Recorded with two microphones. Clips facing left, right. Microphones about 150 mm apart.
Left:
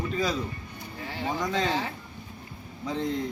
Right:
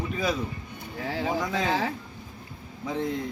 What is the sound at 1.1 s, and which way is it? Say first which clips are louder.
Speech: right 3 dB; 90° right.